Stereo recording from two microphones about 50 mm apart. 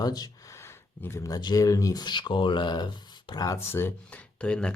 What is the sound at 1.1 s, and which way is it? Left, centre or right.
Speech, left.